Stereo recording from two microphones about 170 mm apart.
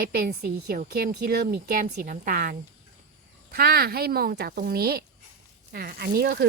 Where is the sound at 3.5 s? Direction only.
65° right (ahead or behind).